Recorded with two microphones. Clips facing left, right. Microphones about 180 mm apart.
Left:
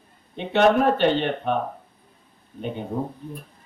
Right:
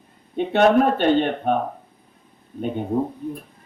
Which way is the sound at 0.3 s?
50° right (ahead or behind).